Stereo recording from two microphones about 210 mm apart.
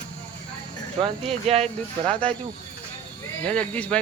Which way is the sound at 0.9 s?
25° right (ahead or behind).